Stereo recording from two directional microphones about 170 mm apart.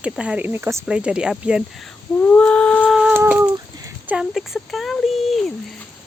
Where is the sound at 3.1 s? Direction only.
10° right (ahead or behind).